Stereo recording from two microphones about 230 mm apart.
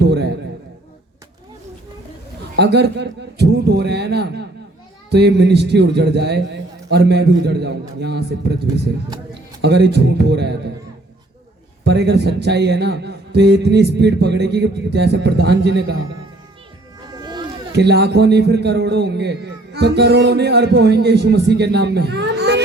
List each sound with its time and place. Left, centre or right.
0.0 s a sound: right
2.6 s a man's voice: right
9.6 s a man's voice: right
11.9 s a man's voice: right
17.2 s children playing: centre
17.7 s a man's voice: right